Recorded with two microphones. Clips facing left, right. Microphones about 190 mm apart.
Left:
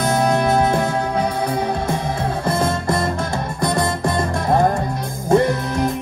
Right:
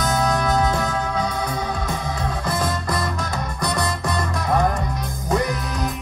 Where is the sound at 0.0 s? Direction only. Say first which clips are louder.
Left 4 dB; 30° left (ahead or behind).